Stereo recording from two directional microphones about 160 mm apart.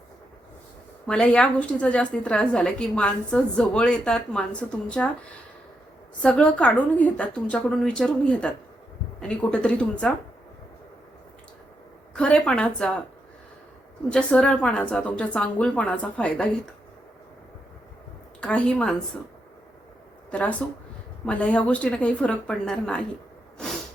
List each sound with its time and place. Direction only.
1.0 s a woman's voice: 5° left (ahead or behind)
6.2 s a woman's voice: 10° left (ahead or behind)
12.1 s a woman's voice: 5° left (ahead or behind)
14.1 s a woman's voice: 5° left (ahead or behind)
18.3 s a woman's voice: 5° left (ahead or behind)
20.3 s a woman's voice: 10° left (ahead or behind)